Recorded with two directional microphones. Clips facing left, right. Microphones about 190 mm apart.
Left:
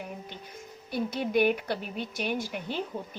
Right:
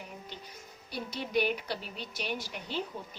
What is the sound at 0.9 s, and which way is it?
A woman's voice, 50° left (ahead or behind).